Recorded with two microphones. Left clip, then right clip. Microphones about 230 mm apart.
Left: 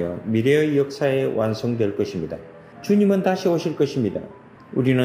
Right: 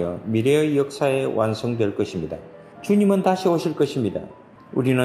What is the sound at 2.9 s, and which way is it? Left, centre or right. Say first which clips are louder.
Speech: even; centre.